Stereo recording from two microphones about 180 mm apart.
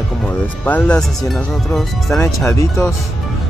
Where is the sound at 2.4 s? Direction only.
15° left (ahead or behind).